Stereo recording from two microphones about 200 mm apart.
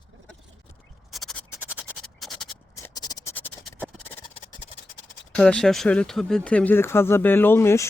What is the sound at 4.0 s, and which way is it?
Music, 10° left (ahead or behind).